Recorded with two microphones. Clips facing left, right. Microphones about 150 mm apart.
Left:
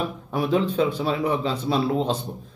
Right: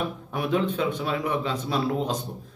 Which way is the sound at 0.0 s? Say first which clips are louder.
Left 3 dB; 35° left (ahead or behind).